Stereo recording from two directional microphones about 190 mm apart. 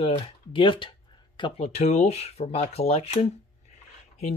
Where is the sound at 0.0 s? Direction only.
25° left (ahead or behind).